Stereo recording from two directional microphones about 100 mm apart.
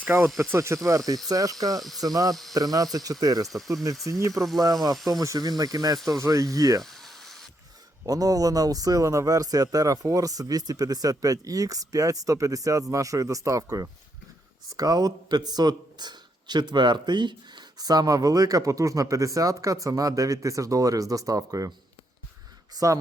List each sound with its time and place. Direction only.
0.0 s speech: 25° right (ahead or behind)
6.8 s a sound: centre (ahead or behind)
8.0 s speech: 35° right (ahead or behind)
22.8 s speech: 40° right (ahead or behind)